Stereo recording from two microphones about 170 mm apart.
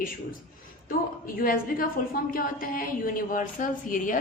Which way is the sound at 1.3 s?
55° left (ahead or behind).